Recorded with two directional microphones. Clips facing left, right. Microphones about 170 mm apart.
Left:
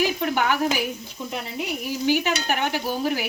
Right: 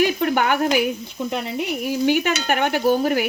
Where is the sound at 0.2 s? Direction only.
55° right (ahead or behind).